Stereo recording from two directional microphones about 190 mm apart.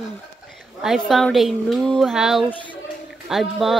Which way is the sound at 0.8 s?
Centre (ahead or behind).